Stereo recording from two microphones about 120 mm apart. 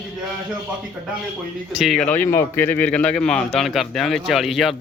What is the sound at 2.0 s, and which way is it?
Speech, 15° left (ahead or behind).